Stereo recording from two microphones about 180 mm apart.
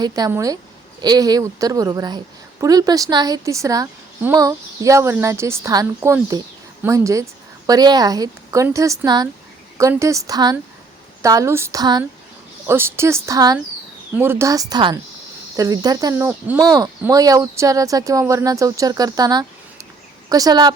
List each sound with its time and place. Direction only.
0.0 s speech: 20° right (ahead or behind)